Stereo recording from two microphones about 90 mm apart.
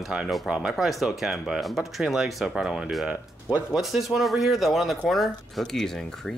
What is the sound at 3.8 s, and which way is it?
Speech, 5° right (ahead or behind).